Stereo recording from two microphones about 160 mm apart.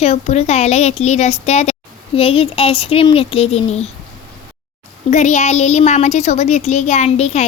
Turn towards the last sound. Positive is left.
turn(degrees=40)  # may be behind; listen again after turning